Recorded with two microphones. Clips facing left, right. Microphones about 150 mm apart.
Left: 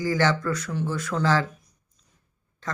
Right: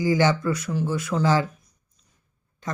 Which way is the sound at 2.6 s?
15° right (ahead or behind).